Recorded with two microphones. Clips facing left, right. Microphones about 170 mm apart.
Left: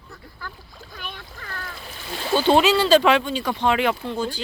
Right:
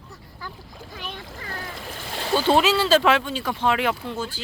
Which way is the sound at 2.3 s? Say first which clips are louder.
Left 2 dB; centre (ahead or behind).